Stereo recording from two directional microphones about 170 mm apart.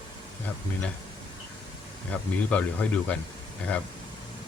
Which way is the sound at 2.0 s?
10° left (ahead or behind).